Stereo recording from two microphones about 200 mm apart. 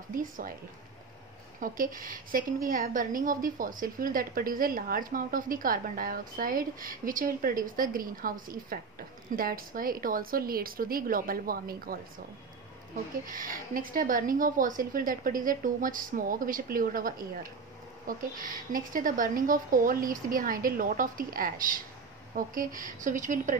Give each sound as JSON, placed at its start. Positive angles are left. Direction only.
{"t": 0.1, "sound": "a woman's voice", "side_deg": -45}
{"t": 1.6, "sound": "a woman's voice", "side_deg": -45}
{"t": 13.3, "sound": "a woman's voice", "side_deg": -45}